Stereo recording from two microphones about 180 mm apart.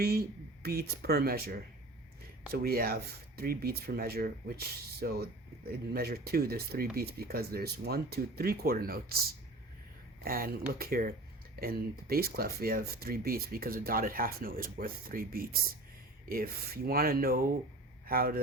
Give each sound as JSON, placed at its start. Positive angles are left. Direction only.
{"t": 0.0, "sound": "speech", "side_deg": -60}
{"t": 10.2, "sound": "speech", "side_deg": -55}